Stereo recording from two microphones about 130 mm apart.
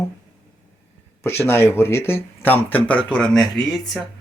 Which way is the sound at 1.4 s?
15° left (ahead or behind).